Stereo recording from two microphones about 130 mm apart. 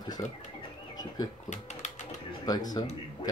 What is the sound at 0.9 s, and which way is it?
Bird, 30° left (ahead or behind).